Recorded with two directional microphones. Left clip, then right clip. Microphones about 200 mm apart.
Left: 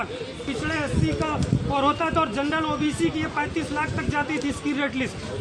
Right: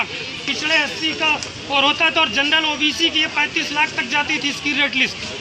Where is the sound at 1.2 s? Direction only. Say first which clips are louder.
Right 7 dB; 10° left (ahead or behind).